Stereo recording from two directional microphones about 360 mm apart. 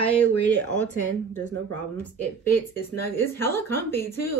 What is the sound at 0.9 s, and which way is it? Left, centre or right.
Speech, centre.